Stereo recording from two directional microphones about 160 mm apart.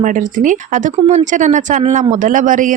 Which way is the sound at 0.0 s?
55° right (ahead or behind).